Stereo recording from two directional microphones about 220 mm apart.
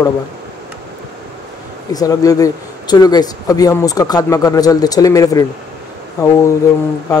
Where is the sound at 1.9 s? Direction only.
15° left (ahead or behind).